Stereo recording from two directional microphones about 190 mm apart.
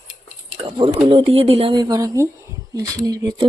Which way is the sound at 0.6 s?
30° right (ahead or behind).